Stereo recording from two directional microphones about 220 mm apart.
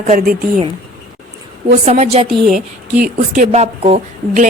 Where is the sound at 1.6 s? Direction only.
35° right (ahead or behind).